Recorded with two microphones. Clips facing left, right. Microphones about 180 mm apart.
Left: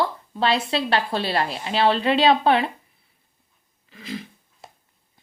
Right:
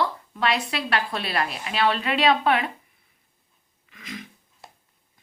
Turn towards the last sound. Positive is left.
turn(degrees=30)  # may be behind; listen again after turning